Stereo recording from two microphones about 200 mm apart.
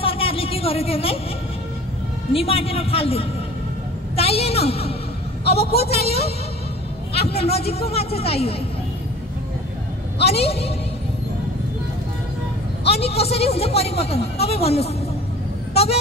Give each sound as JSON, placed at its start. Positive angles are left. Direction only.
{"t": 0.0, "sound": "a sound", "side_deg": 30}
{"t": 2.3, "sound": "a man's voice", "side_deg": 30}
{"t": 5.4, "sound": "a man's voice", "side_deg": 50}
{"t": 7.2, "sound": "a man's voice", "side_deg": 30}
{"t": 10.2, "sound": "a man's voice", "side_deg": 30}
{"t": 12.8, "sound": "a man's voice", "side_deg": 30}
{"t": 15.7, "sound": "vehicle", "side_deg": 30}